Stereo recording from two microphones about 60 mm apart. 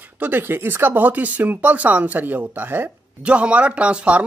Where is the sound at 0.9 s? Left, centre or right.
Right.